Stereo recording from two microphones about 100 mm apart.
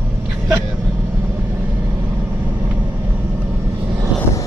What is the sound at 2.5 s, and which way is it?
Vehicle, 15° right (ahead or behind).